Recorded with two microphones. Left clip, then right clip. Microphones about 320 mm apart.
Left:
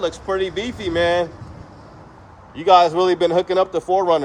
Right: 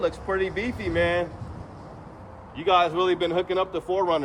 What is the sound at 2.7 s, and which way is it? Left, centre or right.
A man's voice, centre.